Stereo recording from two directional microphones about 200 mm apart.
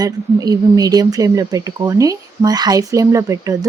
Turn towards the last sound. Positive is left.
turn(degrees=-15)  # may be behind; listen again after turning